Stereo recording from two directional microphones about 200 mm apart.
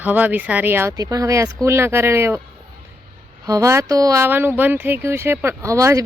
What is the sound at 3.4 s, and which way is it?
Speech, 15° right (ahead or behind).